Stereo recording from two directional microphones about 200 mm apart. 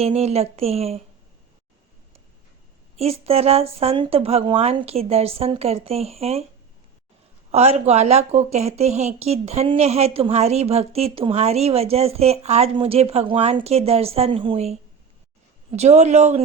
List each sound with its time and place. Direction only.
0.0 s a woman's voice: 30° right (ahead or behind)
3.0 s a woman's voice: 30° right (ahead or behind)
7.5 s a woman's voice: 30° right (ahead or behind)